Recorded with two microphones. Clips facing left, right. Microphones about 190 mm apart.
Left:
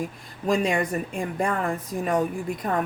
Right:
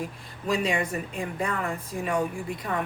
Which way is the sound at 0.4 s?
45° left (ahead or behind).